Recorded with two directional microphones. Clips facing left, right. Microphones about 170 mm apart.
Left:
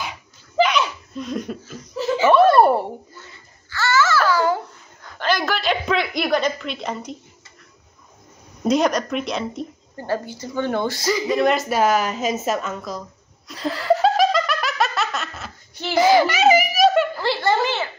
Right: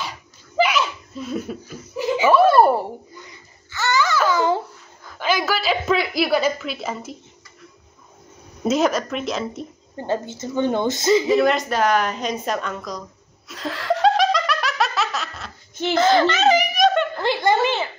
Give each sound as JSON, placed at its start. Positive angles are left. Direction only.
{"t": 0.6, "sound": "laughter", "side_deg": -5}
{"t": 2.3, "sound": "a sound", "side_deg": 0}
{"t": 3.2, "sound": "babbling", "side_deg": -15}
{"t": 5.0, "sound": "a woman's voice", "side_deg": -5}
{"t": 8.6, "sound": "a woman's voice", "side_deg": -5}
{"t": 9.9, "sound": "a woman's voice", "side_deg": -20}
{"t": 11.2, "sound": "a woman's voice", "side_deg": 0}
{"t": 13.5, "sound": "laughter", "side_deg": 0}
{"t": 15.9, "sound": "a sound", "side_deg": 10}
{"t": 17.2, "sound": "a sound", "side_deg": -15}